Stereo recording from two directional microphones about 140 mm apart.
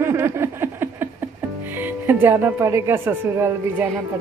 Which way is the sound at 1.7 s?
15° right (ahead or behind).